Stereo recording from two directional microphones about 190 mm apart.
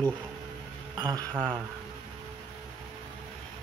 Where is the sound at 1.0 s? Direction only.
20° right (ahead or behind).